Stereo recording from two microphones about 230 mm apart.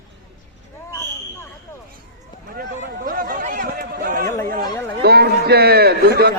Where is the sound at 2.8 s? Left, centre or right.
Right.